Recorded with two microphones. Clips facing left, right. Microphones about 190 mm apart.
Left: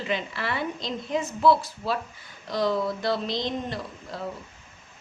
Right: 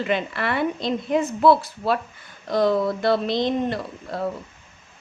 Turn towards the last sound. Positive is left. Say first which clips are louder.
# right 6 dB
turn(degrees=-60)  # may be behind; listen again after turning